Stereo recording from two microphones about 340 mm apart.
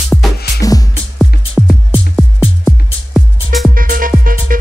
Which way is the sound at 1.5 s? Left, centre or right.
Centre.